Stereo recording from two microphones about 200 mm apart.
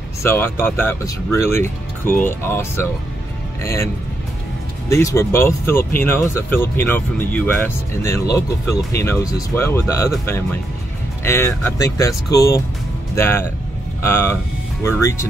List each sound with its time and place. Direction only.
0.2 s speech: 10° left (ahead or behind)